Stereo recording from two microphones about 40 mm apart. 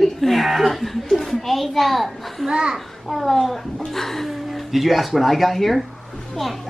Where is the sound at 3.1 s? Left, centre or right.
Centre.